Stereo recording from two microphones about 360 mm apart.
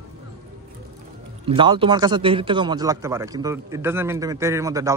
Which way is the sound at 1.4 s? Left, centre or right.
Centre.